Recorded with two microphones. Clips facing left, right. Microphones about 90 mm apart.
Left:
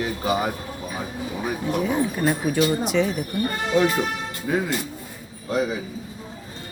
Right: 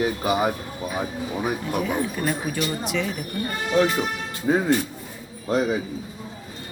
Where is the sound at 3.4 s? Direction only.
5° left (ahead or behind).